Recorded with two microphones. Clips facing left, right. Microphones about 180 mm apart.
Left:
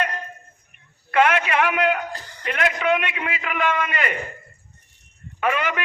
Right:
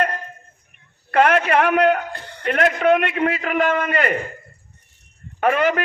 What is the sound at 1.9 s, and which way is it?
A man's voice, 60° right (ahead or behind).